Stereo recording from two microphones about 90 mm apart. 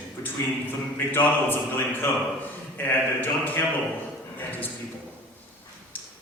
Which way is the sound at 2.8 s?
20° left (ahead or behind).